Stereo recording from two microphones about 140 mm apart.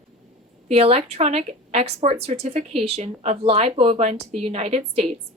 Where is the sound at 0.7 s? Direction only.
45° right (ahead or behind).